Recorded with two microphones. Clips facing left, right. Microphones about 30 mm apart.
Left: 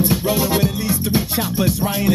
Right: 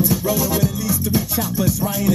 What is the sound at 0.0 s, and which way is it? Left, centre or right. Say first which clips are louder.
Music: left 1 dB; left.